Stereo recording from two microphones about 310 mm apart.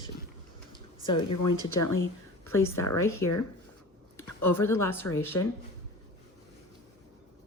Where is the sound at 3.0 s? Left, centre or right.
Centre.